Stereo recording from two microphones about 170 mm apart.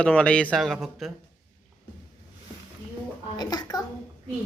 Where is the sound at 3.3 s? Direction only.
25° left (ahead or behind).